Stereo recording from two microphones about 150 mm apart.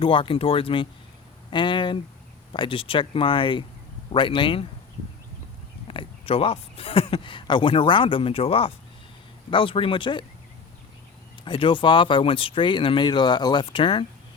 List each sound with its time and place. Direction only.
0.0 s speech: 35° left (ahead or behind)
5.9 s speech: 35° left (ahead or behind)
11.4 s speech: 35° left (ahead or behind)